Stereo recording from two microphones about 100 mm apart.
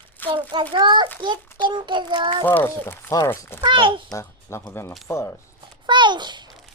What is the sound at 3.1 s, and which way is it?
Speech, 30° left (ahead or behind).